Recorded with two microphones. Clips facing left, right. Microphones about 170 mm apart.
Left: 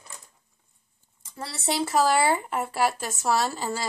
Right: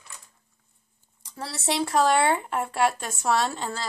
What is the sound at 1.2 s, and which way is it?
Speech, centre (ahead or behind).